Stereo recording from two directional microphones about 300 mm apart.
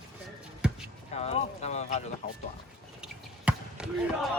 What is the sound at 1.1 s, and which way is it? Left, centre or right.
Speech, left.